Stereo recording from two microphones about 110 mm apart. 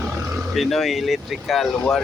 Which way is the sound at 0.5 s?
Centre (ahead or behind).